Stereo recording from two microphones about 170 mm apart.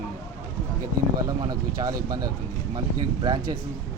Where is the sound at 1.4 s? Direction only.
20° right (ahead or behind).